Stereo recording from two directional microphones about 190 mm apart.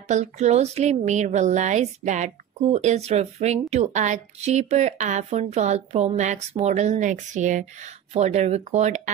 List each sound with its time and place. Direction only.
0.1 s speech: 35° right (ahead or behind)